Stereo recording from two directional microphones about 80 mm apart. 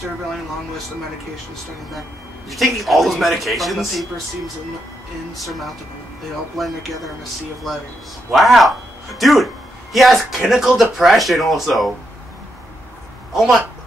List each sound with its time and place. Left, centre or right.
2.5 s speech: centre
5.3 s speech: centre
8.3 s speech: centre
13.3 s speech: centre